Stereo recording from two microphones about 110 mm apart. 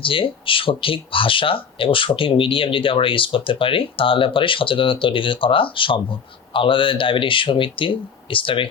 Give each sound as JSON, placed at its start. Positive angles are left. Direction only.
{"t": 0.0, "sound": "speech", "side_deg": 55}